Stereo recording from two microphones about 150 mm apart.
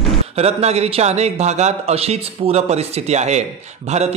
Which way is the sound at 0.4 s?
45° right (ahead or behind).